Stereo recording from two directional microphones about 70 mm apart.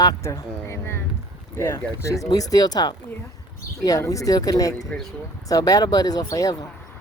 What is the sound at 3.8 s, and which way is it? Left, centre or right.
Speech, left.